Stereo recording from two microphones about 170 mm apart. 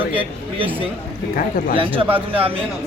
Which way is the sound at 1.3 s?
55° left (ahead or behind).